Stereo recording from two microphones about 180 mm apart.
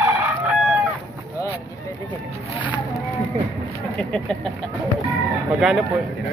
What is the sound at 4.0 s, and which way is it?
Speech, 5° left (ahead or behind).